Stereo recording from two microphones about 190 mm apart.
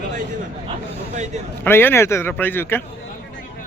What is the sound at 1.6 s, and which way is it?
Speech, 10° left (ahead or behind).